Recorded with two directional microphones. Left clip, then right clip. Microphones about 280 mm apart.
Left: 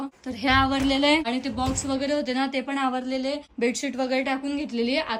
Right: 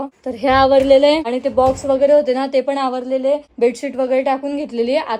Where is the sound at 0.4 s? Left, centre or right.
Centre.